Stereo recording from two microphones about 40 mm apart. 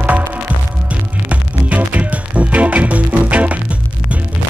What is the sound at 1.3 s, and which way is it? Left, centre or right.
Music, right.